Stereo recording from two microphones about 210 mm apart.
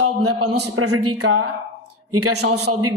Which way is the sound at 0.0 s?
90° right.